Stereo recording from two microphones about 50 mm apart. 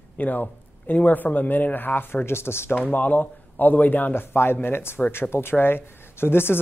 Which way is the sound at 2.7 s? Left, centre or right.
Left.